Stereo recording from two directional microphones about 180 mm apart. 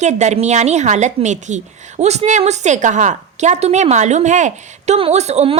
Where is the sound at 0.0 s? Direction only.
40° right (ahead or behind).